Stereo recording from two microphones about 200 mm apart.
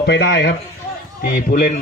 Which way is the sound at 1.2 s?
45° left (ahead or behind).